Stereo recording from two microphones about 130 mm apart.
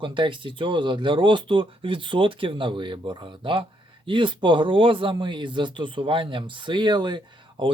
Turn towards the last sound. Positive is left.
turn(degrees=-40)  # may be behind; listen again after turning